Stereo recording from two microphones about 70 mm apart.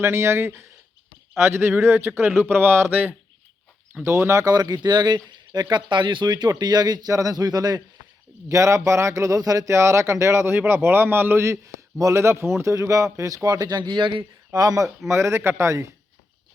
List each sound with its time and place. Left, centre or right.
0.0 s a man's voice: right
4.4 s speech: right
7.1 s speech: right
8.4 s speech: right
9.7 s a man's voice: right
11.9 s speech: right
12.7 s speech: right
15.0 s a man's voice: right